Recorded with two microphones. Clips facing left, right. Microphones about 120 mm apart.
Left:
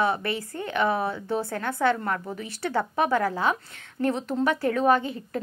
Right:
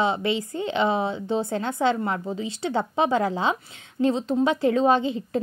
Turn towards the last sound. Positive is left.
turn(degrees=-20)  # may be behind; listen again after turning